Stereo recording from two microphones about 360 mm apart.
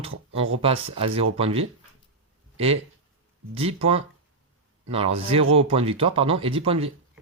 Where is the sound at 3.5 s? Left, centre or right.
Centre.